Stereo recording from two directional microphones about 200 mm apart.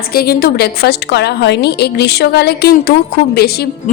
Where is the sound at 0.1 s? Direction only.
50° left (ahead or behind).